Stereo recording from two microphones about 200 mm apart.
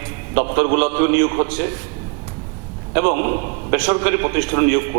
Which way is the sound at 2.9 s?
20° right (ahead or behind).